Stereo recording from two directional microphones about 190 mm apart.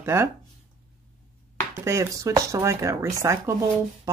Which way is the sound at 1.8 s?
15° right (ahead or behind).